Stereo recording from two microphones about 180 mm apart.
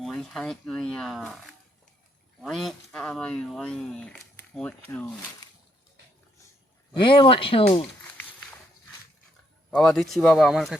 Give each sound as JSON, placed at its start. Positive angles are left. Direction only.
{"t": 0.0, "sound": "speech", "side_deg": 0}
{"t": 6.9, "sound": "speech", "side_deg": 25}
{"t": 9.6, "sound": "speech", "side_deg": 0}